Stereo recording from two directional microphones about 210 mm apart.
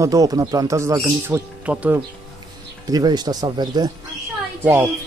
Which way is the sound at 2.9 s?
20° right (ahead or behind).